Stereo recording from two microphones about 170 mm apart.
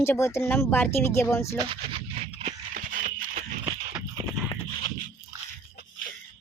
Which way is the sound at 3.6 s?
25° right (ahead or behind).